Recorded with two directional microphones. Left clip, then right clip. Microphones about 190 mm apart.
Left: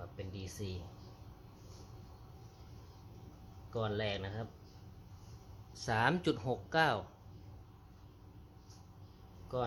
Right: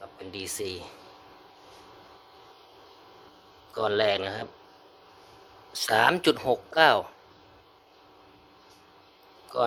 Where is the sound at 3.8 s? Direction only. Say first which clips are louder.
Right 14 dB; 65° right (ahead or behind).